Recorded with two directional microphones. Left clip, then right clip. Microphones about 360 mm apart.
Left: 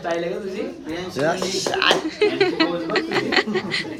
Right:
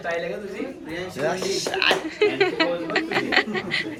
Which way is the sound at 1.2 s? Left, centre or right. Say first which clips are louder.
Left 3 dB; left.